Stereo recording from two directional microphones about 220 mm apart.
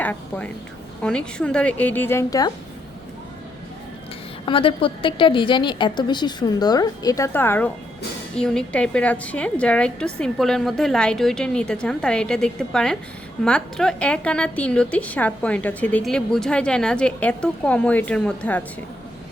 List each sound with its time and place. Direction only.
0.0 s a woman's voice: 5° left (ahead or behind)
4.4 s a woman's voice: 25° left (ahead or behind); by 18.6 s 5° left (ahead or behind)